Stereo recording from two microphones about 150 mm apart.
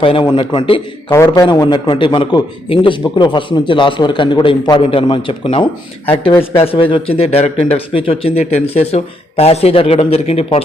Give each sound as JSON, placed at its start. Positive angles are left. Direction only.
{"t": 0.0, "sound": "a man's voice", "side_deg": 35}
{"t": 1.1, "sound": "a man's voice", "side_deg": 20}
{"t": 1.5, "sound": "a man's voice", "side_deg": 30}